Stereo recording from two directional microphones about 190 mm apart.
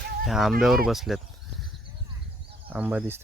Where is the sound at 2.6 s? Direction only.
10° right (ahead or behind).